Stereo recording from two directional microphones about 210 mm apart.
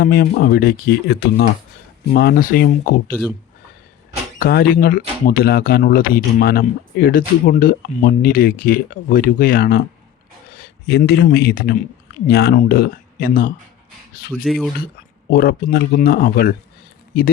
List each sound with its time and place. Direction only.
0.0 s speech: 50° left (ahead or behind)
4.4 s speech: 45° left (ahead or behind)
14.4 s speech: centre (ahead or behind)
15.3 s speech: 50° left (ahead or behind)